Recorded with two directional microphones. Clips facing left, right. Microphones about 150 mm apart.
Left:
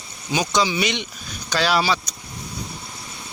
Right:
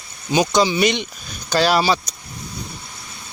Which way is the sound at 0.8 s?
45° right (ahead or behind).